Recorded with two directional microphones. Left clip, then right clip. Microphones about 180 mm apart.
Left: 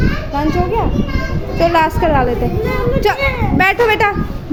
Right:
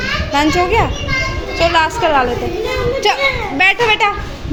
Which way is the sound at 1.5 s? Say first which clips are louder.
Left 1 dB; 25° left (ahead or behind).